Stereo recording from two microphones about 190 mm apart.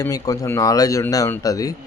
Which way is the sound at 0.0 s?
20° left (ahead or behind).